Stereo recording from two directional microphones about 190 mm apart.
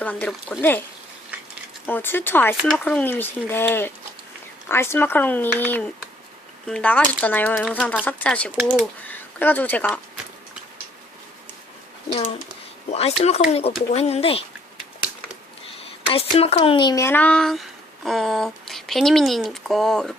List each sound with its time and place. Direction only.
0.0 s speech: 5° left (ahead or behind)
1.9 s speech: 10° left (ahead or behind)
12.0 s a child's voice: 25° left (ahead or behind)
16.0 s speech: 30° left (ahead or behind); by 20.1 s centre (ahead or behind)